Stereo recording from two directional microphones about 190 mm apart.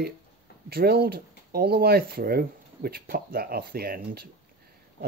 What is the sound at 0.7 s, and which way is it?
Speech, 55° right (ahead or behind).